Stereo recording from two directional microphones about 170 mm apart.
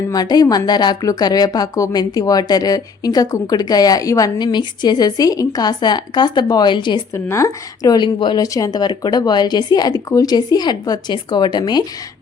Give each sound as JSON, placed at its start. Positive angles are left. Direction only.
{"t": 0.1, "sound": "a woman's voice", "side_deg": 20}
{"t": 7.1, "sound": "a woman's voice", "side_deg": 15}